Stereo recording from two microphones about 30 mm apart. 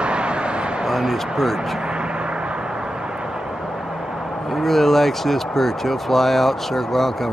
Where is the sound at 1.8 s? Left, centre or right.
Right.